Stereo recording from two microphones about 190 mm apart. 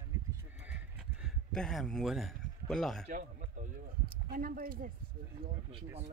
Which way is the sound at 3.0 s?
40° right (ahead or behind).